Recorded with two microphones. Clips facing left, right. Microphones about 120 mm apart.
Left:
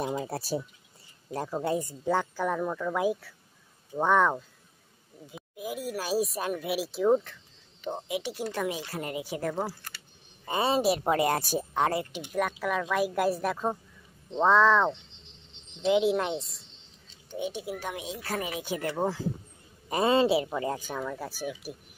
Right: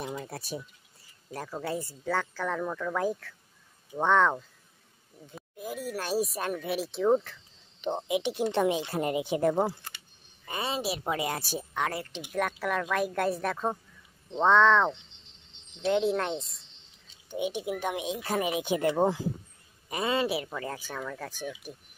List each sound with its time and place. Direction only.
0.0 s speech: 50° left (ahead or behind)
0.3 s a man's voice: 35° left (ahead or behind)
1.3 s speech: 25° left (ahead or behind); by 7.3 s centre (ahead or behind)
7.8 s speech: 20° right (ahead or behind)
10.4 s a woman's voice: 30° left (ahead or behind)
12.2 s speech: centre (ahead or behind)
17.3 s speech: 15° right (ahead or behind)
19.9 s a man's voice: 35° left (ahead or behind); by 21.7 s 10° left (ahead or behind)